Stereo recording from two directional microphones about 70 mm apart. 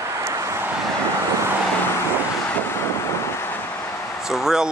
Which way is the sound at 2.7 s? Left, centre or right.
Left.